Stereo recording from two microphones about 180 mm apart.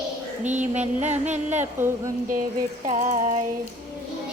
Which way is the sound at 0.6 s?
40° right (ahead or behind).